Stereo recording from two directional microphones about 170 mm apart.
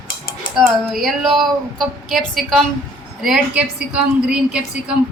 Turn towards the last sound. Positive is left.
turn(degrees=-5)  # may be behind; listen again after turning